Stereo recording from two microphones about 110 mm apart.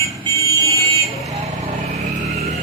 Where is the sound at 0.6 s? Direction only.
30° left (ahead or behind).